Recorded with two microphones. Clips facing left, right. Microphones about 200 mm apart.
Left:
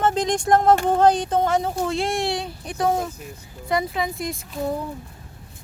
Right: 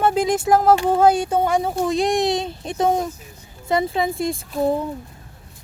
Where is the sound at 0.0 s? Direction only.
10° right (ahead or behind); by 4.4 s 30° right (ahead or behind).